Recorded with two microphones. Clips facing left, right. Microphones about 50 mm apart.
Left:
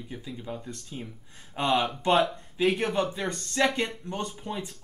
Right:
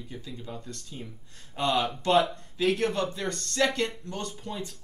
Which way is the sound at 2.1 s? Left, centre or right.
Centre.